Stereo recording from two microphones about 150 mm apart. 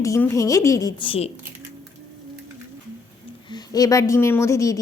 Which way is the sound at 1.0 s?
40° left (ahead or behind).